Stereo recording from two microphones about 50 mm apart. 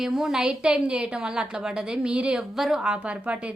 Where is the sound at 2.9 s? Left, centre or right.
Right.